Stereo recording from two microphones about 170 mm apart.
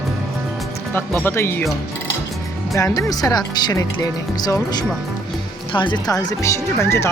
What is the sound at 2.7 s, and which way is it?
Speech, 20° left (ahead or behind).